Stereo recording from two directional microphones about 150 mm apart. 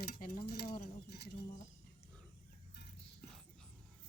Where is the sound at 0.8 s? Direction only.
90° left.